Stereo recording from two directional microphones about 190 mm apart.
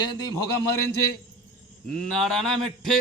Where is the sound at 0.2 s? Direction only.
20° left (ahead or behind).